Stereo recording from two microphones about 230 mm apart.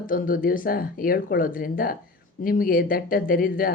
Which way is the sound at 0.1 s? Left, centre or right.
Left.